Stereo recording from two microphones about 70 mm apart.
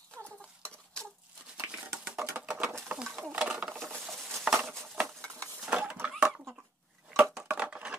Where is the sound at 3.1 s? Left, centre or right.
Right.